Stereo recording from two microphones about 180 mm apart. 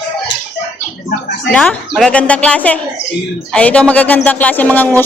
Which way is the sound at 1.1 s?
70° left (ahead or behind).